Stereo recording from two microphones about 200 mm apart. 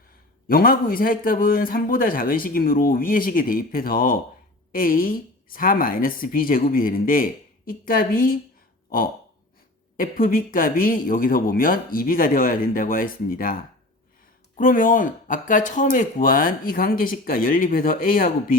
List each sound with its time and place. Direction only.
0.4 s speech: 45° left (ahead or behind)
10.0 s speech: 45° left (ahead or behind)